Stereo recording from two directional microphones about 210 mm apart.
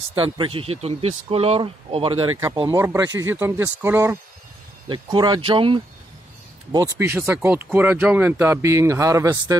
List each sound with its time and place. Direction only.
0.1 s speech: 25° right (ahead or behind)
4.8 s speech: 20° right (ahead or behind)